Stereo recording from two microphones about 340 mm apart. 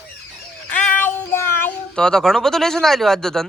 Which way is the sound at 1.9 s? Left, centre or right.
Centre.